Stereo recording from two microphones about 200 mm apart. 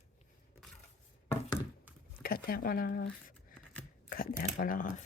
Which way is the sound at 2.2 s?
50° left (ahead or behind).